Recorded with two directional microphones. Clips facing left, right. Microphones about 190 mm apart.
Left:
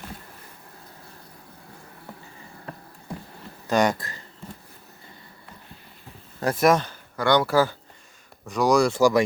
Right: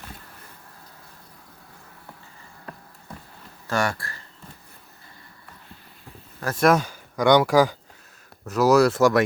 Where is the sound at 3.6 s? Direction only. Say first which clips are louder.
Left 4 dB; 20° left (ahead or behind).